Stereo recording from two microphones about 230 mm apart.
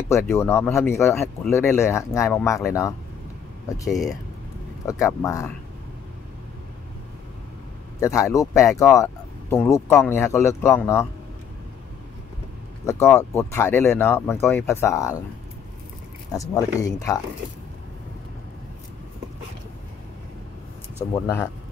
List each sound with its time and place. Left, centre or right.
0.1 s speech: centre
8.0 s speech: centre
12.8 s speech: centre
16.3 s speech: centre
21.1 s speech: centre